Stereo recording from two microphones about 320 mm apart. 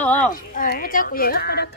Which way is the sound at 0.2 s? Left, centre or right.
Left.